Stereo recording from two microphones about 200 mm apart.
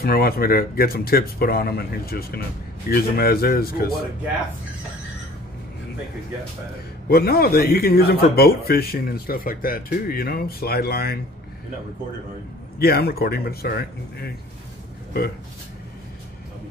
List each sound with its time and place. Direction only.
0.0 s speech: 50° left (ahead or behind)
7.1 s speech: 50° left (ahead or behind)
12.7 s speech: 50° left (ahead or behind)